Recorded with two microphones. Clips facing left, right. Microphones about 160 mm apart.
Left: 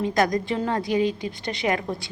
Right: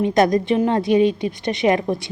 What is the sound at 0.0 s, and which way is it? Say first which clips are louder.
A woman's voice: right 6 dB; 25° right (ahead or behind).